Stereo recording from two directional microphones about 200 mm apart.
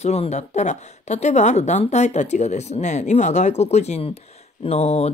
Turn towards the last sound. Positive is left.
turn(degrees=30)  # may be behind; listen again after turning